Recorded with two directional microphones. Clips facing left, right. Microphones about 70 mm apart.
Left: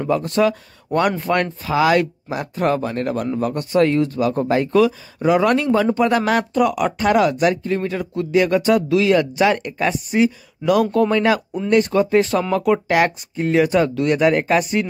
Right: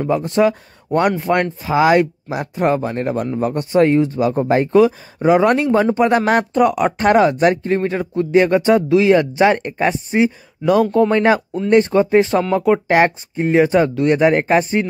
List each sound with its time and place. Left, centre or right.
0.1 s speech: right